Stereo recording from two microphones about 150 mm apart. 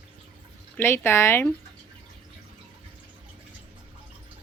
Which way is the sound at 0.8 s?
15° left (ahead or behind).